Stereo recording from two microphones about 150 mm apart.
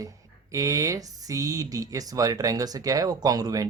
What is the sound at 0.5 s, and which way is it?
Speech, 20° right (ahead or behind).